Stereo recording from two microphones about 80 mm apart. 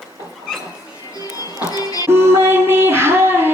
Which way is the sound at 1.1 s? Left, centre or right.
Left.